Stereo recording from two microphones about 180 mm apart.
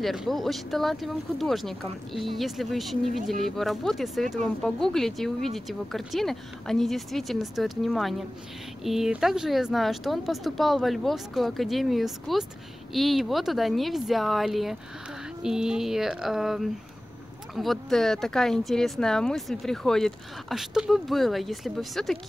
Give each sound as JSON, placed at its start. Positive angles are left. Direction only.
{"t": 0.0, "sound": "speech", "side_deg": 0}